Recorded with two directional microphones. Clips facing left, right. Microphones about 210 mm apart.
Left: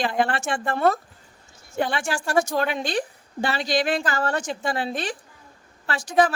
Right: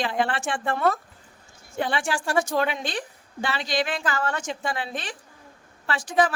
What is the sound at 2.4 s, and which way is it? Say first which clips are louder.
A woman's voice: left 3 dB; 40° left (ahead or behind).